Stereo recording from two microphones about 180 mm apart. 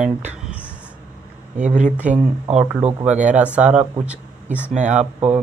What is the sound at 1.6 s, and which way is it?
Speech, 40° right (ahead or behind).